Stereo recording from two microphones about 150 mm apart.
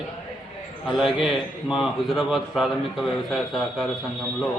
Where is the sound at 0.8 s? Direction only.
Centre (ahead or behind).